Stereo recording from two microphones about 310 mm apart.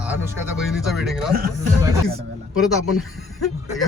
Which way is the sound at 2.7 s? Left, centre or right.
Left.